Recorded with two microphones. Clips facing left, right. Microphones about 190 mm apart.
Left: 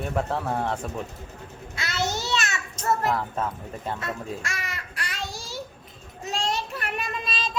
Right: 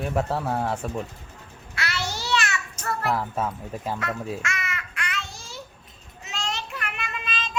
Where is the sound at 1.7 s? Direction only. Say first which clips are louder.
Left 2 dB; 20° left (ahead or behind).